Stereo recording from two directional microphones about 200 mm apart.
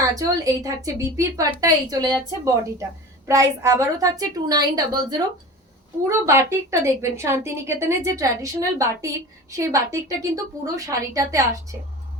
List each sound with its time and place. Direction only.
0.0 s a woman's voice: 15° right (ahead or behind)
3.2 s a woman's voice: 15° right (ahead or behind)